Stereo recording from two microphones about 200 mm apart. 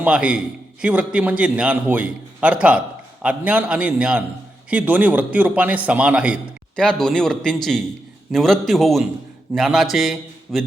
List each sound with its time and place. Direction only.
0.0 s a man's voice: 5° right (ahead or behind)